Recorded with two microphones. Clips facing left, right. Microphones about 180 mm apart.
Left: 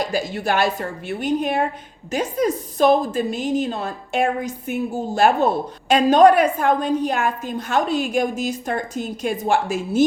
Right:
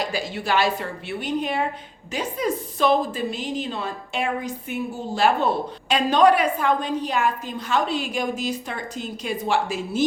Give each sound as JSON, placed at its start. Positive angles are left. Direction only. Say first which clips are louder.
{"t": 0.1, "sound": "a woman's voice", "louder": "left 3 dB", "side_deg": 45}